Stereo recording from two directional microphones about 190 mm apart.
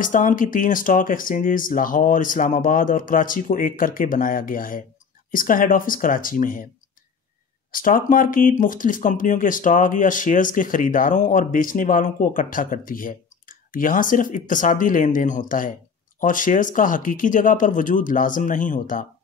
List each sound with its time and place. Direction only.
0.0 s speech: 45° left (ahead or behind)
7.7 s speech: 45° left (ahead or behind)